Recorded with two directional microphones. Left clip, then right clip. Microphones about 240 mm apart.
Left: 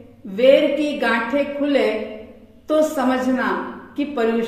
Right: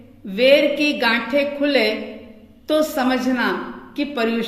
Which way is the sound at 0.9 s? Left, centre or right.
Right.